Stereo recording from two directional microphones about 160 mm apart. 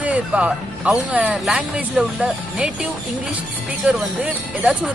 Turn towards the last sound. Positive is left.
turn(degrees=-10)  # may be behind; listen again after turning